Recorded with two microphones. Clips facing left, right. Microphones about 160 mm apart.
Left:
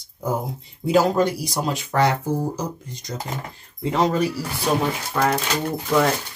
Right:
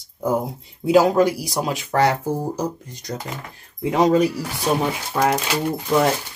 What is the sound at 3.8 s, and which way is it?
Speech, 15° right (ahead or behind).